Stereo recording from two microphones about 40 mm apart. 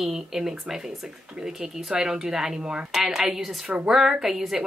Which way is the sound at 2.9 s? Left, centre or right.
Centre.